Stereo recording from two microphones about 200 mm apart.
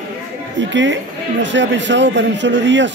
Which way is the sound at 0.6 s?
65° right (ahead or behind).